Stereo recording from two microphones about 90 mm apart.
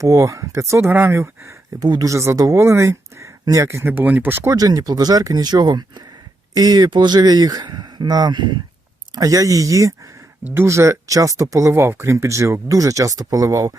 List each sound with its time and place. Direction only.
0.0 s speech: 40° right (ahead or behind)
1.8 s speech: 50° right (ahead or behind)
2.0 s speech: 35° right (ahead or behind)
4.5 s speech: 45° right (ahead or behind)
9.1 s speech: 40° right (ahead or behind)